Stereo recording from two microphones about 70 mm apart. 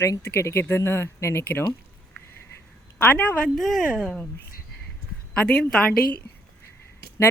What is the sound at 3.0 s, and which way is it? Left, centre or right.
Speech, left.